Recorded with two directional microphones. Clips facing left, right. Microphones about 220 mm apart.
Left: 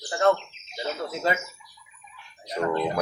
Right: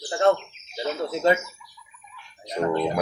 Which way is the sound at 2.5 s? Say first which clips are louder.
Right 2 dB; 15° right (ahead or behind).